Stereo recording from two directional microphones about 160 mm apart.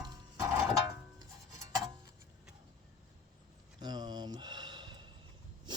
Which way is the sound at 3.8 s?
25° right (ahead or behind).